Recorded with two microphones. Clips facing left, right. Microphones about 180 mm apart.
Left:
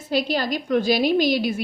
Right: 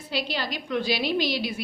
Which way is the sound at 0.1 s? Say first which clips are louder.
Left 7 dB; 45° left (ahead or behind).